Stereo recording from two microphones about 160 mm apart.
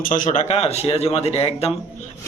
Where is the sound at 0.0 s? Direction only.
55° left (ahead or behind); by 1.7 s 40° left (ahead or behind).